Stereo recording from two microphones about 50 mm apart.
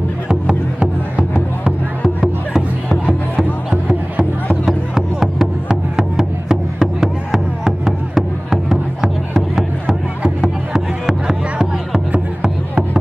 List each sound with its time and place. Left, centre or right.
0.3 s music: centre
4.6 s music: centre